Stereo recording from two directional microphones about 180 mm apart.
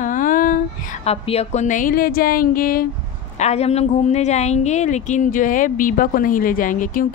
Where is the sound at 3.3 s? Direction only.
35° left (ahead or behind).